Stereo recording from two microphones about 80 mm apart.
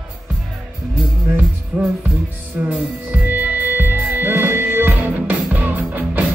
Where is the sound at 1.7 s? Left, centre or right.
Right.